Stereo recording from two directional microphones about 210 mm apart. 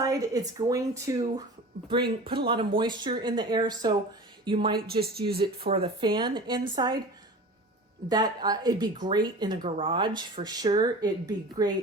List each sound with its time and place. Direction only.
0.0 s speech: 15° right (ahead or behind)
4.9 s speech: 45° right (ahead or behind)
5.6 s speech: 25° right (ahead or behind)
8.1 s speech: 20° right (ahead or behind)